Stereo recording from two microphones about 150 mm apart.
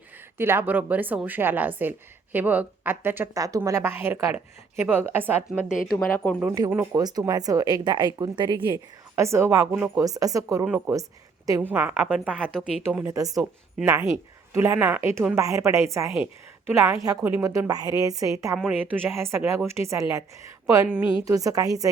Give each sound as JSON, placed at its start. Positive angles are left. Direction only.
{"t": 0.3, "sound": "speech", "side_deg": -15}
{"t": 6.0, "sound": "a woman's voice", "side_deg": 10}
{"t": 6.9, "sound": "speech", "side_deg": -25}
{"t": 9.7, "sound": "speech", "side_deg": -5}
{"t": 10.0, "sound": "a woman's voice", "side_deg": -25}
{"t": 11.7, "sound": "speech", "side_deg": -10}
{"t": 14.5, "sound": "speech", "side_deg": -15}
{"t": 18.5, "sound": "speech", "side_deg": -10}